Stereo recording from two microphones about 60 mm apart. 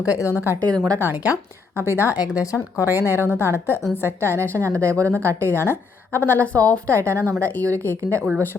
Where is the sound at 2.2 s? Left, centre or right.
Centre.